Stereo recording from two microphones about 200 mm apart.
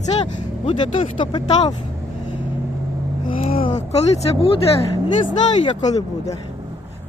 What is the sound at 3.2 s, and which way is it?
Vehicle, 30° left (ahead or behind).